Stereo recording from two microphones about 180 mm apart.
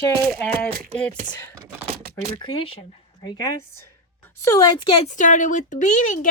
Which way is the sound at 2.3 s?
30° left (ahead or behind).